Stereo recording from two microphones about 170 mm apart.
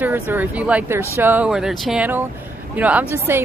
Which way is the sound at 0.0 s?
10° right (ahead or behind).